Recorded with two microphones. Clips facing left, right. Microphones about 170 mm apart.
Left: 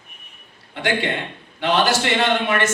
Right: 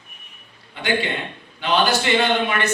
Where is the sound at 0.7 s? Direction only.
75° left (ahead or behind).